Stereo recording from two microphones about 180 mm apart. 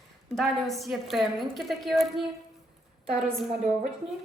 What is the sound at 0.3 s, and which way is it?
A woman's voice, centre (ahead or behind).